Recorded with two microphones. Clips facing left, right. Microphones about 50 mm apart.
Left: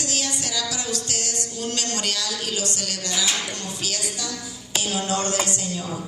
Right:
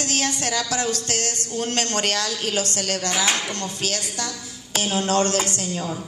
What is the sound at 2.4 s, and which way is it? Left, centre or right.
Speech, right.